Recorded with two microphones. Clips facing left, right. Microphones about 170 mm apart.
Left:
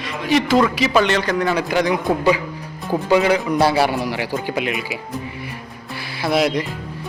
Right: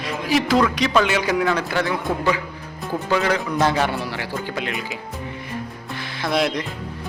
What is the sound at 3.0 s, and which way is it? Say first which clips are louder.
Speech: left 5 dB; 15° left (ahead or behind).